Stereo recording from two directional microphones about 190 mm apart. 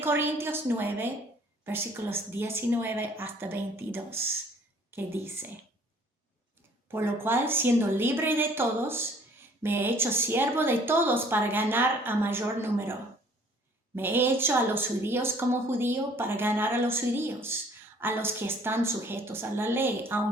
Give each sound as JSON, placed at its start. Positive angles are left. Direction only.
{"t": 0.0, "sound": "a woman's voice", "side_deg": -10}
{"t": 6.8, "sound": "a woman's voice", "side_deg": -10}